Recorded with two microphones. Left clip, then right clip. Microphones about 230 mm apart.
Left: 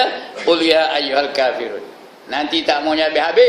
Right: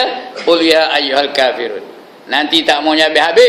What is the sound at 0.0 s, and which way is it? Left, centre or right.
A man's voice, centre.